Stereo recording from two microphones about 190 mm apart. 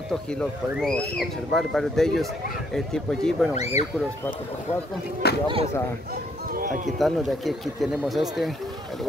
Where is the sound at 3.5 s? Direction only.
35° left (ahead or behind).